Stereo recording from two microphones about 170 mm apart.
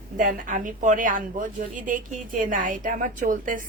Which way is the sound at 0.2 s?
50° right (ahead or behind).